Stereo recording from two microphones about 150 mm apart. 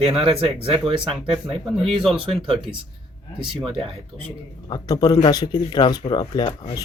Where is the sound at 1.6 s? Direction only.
Centre (ahead or behind).